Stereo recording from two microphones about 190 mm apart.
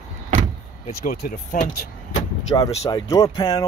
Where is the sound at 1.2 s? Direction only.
50° left (ahead or behind).